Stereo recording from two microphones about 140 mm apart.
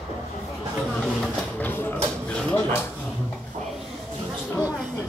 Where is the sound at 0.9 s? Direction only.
10° left (ahead or behind).